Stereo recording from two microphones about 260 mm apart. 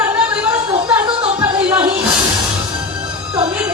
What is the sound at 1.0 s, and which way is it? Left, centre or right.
Music, centre.